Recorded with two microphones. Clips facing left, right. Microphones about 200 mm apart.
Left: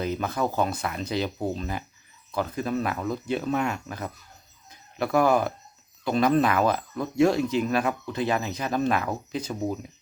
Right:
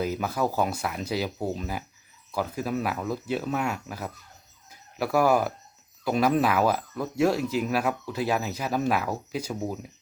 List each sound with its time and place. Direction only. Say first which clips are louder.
0.0 s speech: even; 5° right (ahead or behind)
4.7 s a sound: left 1 dB; 5° right (ahead or behind)
6.1 s speech: left 1 dB; 5° right (ahead or behind)